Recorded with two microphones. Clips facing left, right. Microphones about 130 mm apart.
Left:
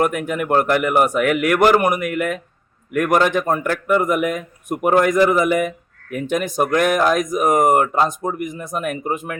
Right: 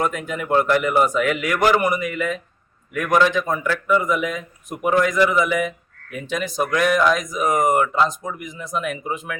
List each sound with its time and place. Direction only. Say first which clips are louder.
0.0 s a man's voice: left 4 dB; 60° left (ahead or behind)